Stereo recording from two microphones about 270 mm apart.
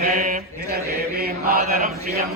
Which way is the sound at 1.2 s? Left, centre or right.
Right.